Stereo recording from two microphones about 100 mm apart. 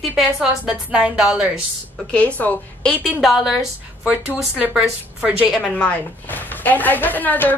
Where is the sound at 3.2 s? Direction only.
5° right (ahead or behind).